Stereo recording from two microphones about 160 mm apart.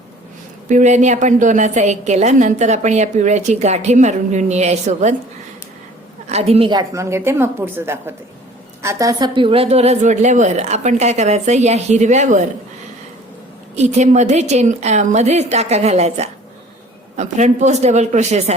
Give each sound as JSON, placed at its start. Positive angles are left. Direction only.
{"t": 0.7, "sound": "a woman's voice", "side_deg": -50}
{"t": 6.2, "sound": "a woman's voice", "side_deg": -40}
{"t": 6.7, "sound": "a woman's voice", "side_deg": -20}
{"t": 13.7, "sound": "a woman's voice", "side_deg": -45}